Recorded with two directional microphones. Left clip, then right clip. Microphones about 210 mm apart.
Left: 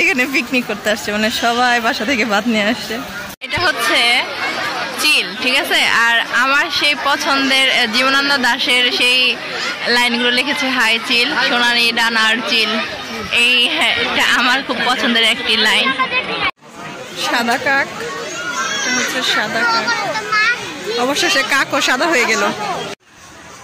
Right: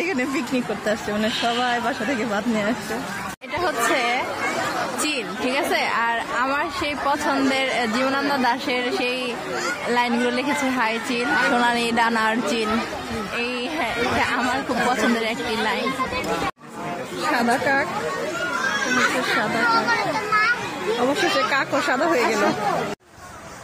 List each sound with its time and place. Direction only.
0.0 s speech: 10° left (ahead or behind)
3.5 s a woman's voice: 5° right (ahead or behind)
17.4 s a woman's voice: centre (ahead or behind)
21.1 s a woman's voice: centre (ahead or behind)